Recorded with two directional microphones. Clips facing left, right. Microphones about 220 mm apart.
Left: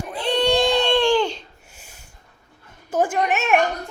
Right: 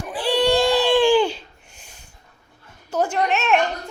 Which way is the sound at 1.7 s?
10° left (ahead or behind).